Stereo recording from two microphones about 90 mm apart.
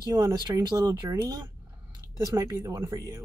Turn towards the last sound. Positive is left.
turn(degrees=-40)  # may be behind; listen again after turning